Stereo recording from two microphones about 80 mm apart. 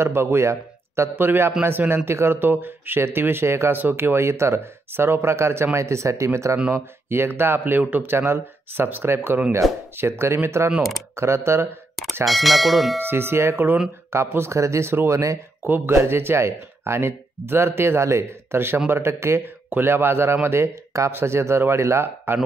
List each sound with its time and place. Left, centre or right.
0.0 s speech: right
12.3 s speech: centre
13.0 s speech: right